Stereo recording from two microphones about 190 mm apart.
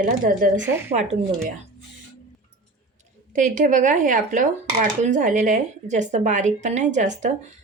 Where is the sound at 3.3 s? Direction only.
40° right (ahead or behind).